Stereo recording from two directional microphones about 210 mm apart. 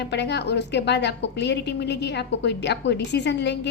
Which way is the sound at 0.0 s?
55° left (ahead or behind).